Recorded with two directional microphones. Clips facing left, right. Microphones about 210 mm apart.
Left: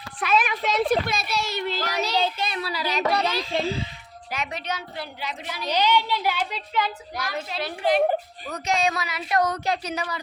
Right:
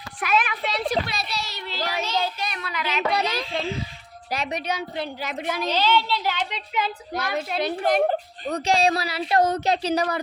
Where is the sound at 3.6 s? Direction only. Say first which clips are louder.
Left 2 dB; 35° left (ahead or behind).